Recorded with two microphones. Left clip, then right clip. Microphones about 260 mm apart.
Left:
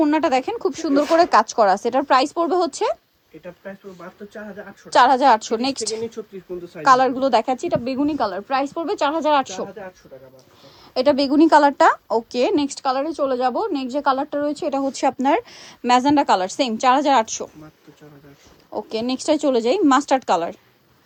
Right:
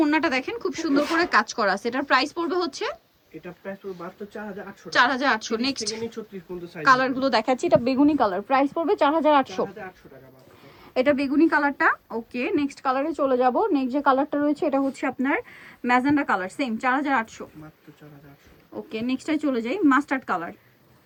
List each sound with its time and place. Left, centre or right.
0.0 s speech: centre
3.4 s a woman's voice: centre
4.9 s a woman's voice: left; by 9.5 s centre
10.9 s a woman's voice: centre
14.8 s speech: centre
18.7 s speech: centre